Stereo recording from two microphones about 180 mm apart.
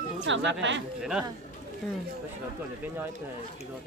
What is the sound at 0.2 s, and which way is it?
Speech, 90° right.